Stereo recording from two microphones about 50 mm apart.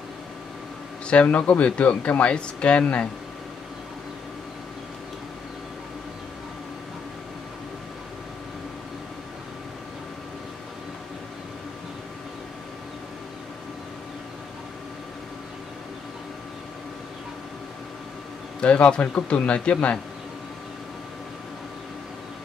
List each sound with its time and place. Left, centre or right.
1.0 s a man's voice: left
18.6 s a man's voice: left